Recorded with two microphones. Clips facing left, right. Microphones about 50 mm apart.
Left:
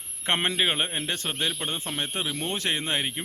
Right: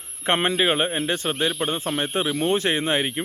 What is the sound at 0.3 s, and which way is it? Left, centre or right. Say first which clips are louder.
Speech: right 5 dB; centre.